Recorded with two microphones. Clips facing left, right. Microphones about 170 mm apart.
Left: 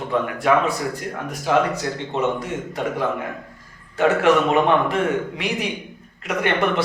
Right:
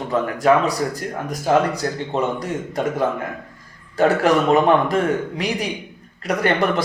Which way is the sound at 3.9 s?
40° right (ahead or behind).